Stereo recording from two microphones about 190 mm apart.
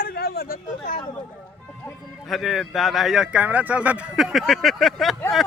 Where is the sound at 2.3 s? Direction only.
Centre (ahead or behind).